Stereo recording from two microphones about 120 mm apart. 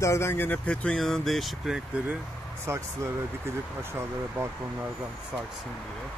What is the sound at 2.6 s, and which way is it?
Speech, 25° right (ahead or behind).